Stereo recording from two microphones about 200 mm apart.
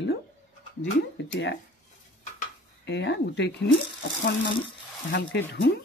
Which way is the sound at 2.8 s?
60° left (ahead or behind).